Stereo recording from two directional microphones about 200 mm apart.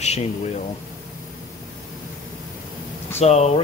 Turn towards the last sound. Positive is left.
turn(degrees=35)  # may be behind; listen again after turning